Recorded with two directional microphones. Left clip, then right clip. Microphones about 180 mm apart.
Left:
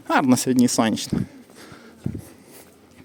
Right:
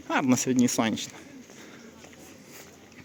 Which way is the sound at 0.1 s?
30° left (ahead or behind).